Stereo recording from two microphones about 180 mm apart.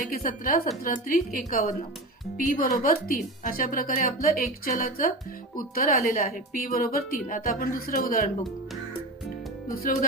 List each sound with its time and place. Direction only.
0.2 s a woman's voice: 50° left (ahead or behind)
9.7 s a woman's voice: 50° left (ahead or behind)